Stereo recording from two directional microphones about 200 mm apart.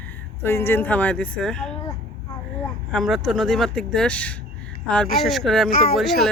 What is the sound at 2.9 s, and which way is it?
Speech, centre (ahead or behind).